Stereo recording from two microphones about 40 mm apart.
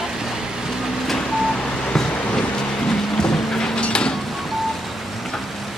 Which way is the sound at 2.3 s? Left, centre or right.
Left.